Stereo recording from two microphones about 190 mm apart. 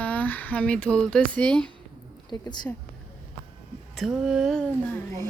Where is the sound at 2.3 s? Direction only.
20° left (ahead or behind).